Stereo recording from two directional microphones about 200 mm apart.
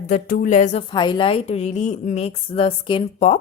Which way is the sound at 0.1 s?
40° left (ahead or behind).